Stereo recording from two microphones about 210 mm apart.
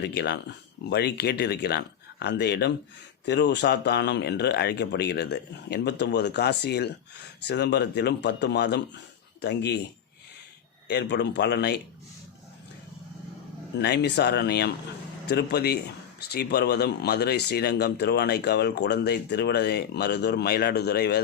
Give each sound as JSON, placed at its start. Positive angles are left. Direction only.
{"t": 0.0, "sound": "speech", "side_deg": 50}
{"t": 10.8, "sound": "speech", "side_deg": 55}
{"t": 13.7, "sound": "speech", "side_deg": 55}